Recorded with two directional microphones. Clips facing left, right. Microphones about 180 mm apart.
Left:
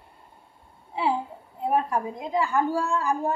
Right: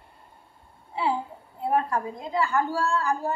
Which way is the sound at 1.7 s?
15° left (ahead or behind).